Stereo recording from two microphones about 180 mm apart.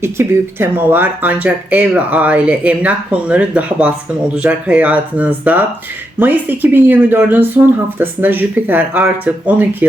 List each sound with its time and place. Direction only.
0.0 s speech: 15° right (ahead or behind)